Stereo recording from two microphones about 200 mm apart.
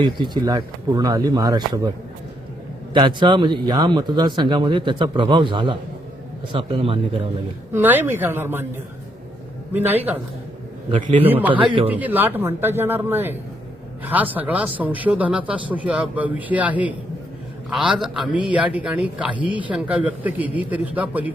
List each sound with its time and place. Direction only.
0.0 s speech: 20° right (ahead or behind)
2.9 s speech: 25° right (ahead or behind)
7.7 s speech: 10° right (ahead or behind)
9.7 s speech: 10° right (ahead or behind)
11.0 s a man's voice: 35° right (ahead or behind)
11.3 s speech: 10° right (ahead or behind)